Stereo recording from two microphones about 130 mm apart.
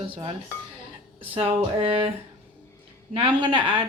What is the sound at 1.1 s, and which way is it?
Speech, 50° right (ahead or behind).